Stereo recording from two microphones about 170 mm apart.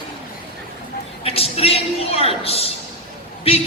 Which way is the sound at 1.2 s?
35° left (ahead or behind).